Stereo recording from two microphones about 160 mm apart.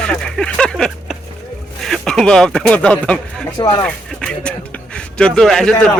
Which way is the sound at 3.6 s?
20° left (ahead or behind).